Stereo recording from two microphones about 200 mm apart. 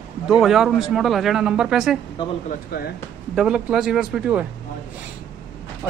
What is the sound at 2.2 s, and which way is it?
Speech, 25° left (ahead or behind).